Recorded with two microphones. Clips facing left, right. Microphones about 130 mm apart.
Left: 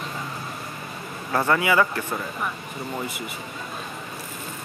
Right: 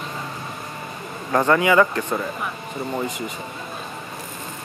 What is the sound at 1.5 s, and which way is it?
Speech, 35° right (ahead or behind).